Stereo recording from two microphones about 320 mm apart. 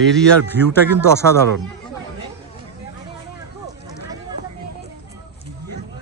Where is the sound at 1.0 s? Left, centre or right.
Centre.